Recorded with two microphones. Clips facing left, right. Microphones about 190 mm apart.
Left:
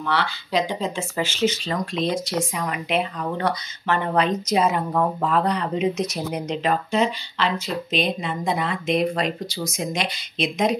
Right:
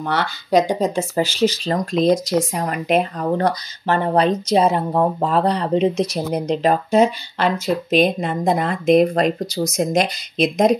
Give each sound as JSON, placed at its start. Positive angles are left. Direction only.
{"t": 0.0, "sound": "speech", "side_deg": -45}